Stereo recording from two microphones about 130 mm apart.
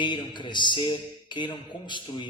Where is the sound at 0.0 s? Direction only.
35° left (ahead or behind).